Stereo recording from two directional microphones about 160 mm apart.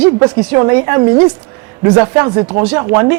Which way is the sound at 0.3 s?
25° right (ahead or behind).